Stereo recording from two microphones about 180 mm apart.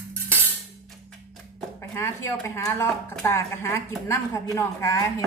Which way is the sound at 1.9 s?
15° left (ahead or behind).